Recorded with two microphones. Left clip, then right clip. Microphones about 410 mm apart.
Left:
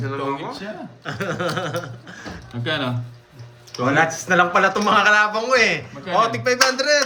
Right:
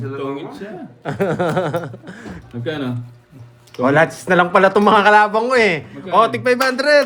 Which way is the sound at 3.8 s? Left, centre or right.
Centre.